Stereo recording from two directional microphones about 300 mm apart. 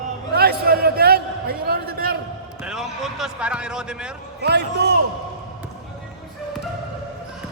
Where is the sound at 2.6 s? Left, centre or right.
Centre.